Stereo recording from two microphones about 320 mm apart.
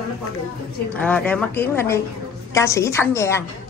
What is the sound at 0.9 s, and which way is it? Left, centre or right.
A woman's voice, centre.